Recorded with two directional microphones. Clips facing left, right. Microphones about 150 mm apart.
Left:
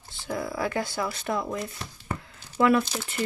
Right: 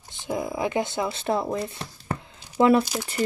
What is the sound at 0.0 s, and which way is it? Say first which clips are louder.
Speech: right 3 dB; 20° right (ahead or behind).